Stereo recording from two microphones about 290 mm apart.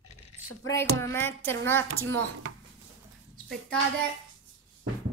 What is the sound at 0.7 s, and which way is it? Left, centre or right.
A woman's voice, centre.